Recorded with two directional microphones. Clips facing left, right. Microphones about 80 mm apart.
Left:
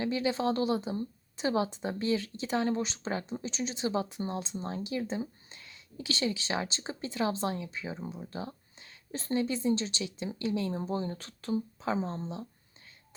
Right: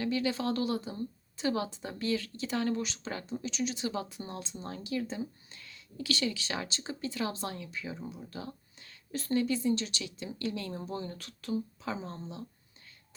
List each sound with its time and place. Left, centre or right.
0.0 s speech: left